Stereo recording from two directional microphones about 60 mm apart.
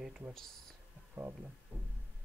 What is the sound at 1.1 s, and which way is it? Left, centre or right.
Speech, right.